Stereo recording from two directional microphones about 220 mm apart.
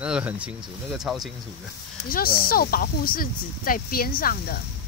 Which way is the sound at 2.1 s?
40° left (ahead or behind).